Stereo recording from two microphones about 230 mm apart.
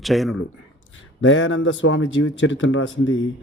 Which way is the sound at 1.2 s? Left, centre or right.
Left.